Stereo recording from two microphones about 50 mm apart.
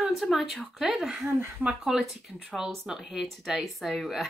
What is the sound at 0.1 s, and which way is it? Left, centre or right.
Speech, centre.